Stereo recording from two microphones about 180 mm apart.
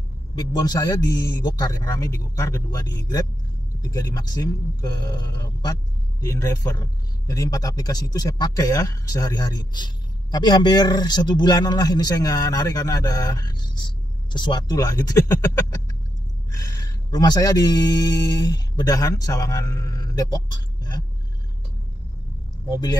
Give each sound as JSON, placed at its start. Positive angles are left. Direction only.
{"t": 0.4, "sound": "speech", "side_deg": 20}
{"t": 17.1, "sound": "speech", "side_deg": 20}
{"t": 22.7, "sound": "speech", "side_deg": 20}